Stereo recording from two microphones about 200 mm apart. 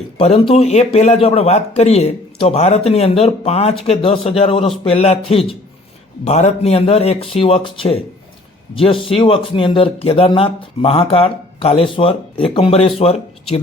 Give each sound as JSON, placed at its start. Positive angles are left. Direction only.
{"t": 0.2, "sound": "a man's voice", "side_deg": 30}